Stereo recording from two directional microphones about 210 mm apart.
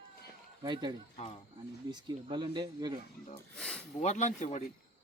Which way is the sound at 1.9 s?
20° right (ahead or behind).